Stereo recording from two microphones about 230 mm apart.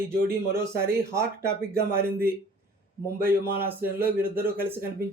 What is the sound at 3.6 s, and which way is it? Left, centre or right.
Speech, centre.